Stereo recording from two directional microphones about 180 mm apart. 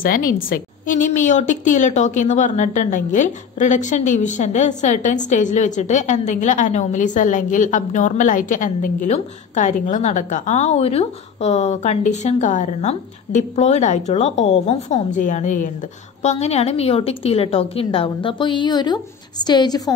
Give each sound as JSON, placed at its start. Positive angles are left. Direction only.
{"t": 0.0, "sound": "a woman's voice", "side_deg": 50}